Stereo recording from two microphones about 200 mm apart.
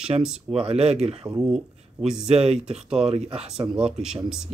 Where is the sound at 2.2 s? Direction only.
30° right (ahead or behind).